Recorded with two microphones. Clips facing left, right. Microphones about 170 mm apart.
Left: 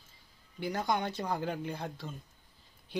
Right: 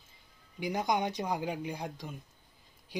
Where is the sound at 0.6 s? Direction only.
15° right (ahead or behind).